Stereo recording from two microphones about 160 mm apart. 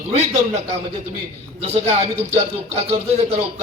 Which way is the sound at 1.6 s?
40° right (ahead or behind).